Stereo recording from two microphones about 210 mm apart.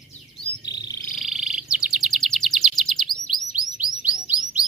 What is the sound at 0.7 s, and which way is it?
Frog, 20° left (ahead or behind).